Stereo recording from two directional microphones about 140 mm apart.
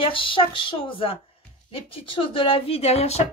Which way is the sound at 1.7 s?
40° left (ahead or behind).